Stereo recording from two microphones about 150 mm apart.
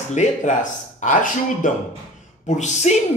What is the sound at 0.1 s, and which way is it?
A man's voice, 50° left (ahead or behind).